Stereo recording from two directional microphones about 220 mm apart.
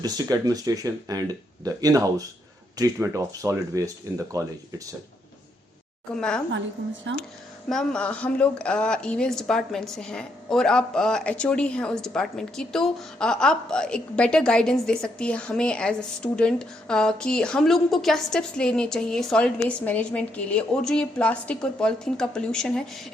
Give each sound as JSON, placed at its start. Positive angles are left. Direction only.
{"t": 0.0, "sound": "speech", "side_deg": -15}
{"t": 6.1, "sound": "speech", "side_deg": 5}
{"t": 7.1, "sound": "speech", "side_deg": -55}
{"t": 7.7, "sound": "speech", "side_deg": 5}